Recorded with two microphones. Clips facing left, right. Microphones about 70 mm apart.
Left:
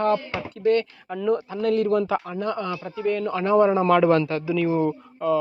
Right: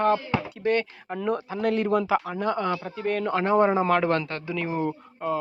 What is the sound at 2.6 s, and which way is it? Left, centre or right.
Speech, right.